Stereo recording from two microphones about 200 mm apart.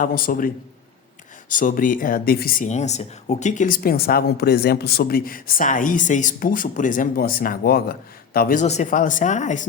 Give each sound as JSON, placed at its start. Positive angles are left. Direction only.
{"t": 0.0, "sound": "speech", "side_deg": 45}
{"t": 8.6, "sound": "speech", "side_deg": 35}